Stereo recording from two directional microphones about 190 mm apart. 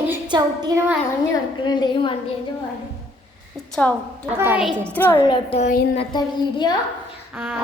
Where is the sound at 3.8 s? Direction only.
5° left (ahead or behind).